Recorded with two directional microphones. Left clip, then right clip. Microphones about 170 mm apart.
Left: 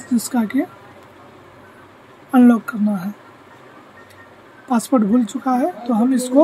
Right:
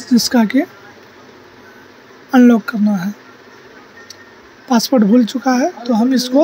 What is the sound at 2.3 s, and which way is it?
Speech, 10° right (ahead or behind).